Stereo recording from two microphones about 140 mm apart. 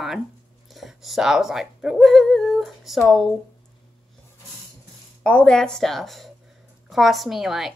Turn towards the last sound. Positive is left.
turn(degrees=0)  # may be behind; listen again after turning